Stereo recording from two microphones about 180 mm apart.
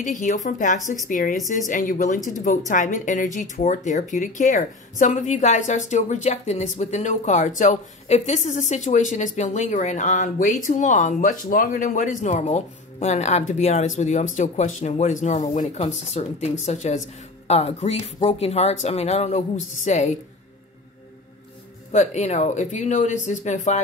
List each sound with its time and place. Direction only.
0.0 s speech: 45° left (ahead or behind)
21.9 s speech: 40° left (ahead or behind)